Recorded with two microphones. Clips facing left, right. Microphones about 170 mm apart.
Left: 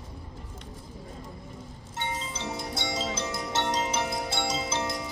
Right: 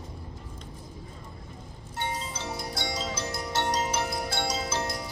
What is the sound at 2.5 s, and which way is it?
Mallet percussion, 25° left (ahead or behind).